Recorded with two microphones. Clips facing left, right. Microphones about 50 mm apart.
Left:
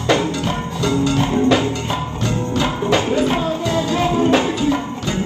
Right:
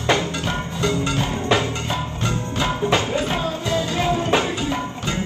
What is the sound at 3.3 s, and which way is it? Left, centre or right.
Music, left.